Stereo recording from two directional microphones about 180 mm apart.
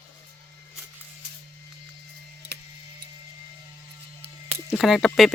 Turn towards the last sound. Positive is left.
turn(degrees=0)  # may be behind; listen again after turning